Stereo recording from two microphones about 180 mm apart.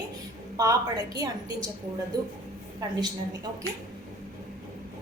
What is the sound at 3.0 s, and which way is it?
Speech, 20° right (ahead or behind).